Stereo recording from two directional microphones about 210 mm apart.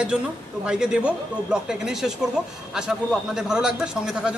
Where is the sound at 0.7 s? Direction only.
5° right (ahead or behind).